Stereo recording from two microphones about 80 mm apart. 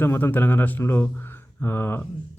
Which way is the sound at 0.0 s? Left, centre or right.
Left.